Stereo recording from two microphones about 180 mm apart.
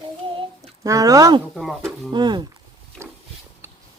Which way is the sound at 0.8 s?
20° right (ahead or behind).